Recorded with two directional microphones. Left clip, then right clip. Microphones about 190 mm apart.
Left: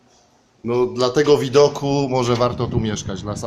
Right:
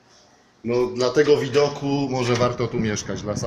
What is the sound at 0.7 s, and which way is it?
Speech, 20° left (ahead or behind).